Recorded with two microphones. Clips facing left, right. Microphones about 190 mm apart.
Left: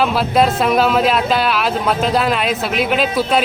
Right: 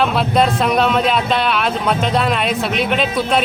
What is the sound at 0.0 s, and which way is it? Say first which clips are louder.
Speech: left 1 dB; centre (ahead or behind).